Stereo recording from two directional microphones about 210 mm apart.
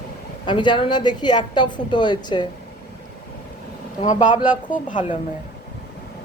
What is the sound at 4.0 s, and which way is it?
Speech, 25° left (ahead or behind).